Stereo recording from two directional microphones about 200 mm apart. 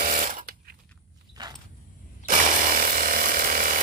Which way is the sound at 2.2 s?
40° right (ahead or behind).